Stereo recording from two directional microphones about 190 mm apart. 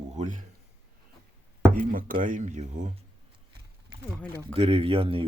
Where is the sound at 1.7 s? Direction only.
45° right (ahead or behind).